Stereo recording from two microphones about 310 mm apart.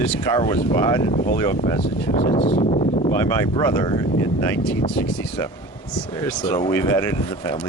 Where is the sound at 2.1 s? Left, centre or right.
Centre.